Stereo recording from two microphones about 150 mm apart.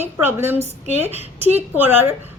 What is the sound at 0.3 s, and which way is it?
Speech, 15° right (ahead or behind).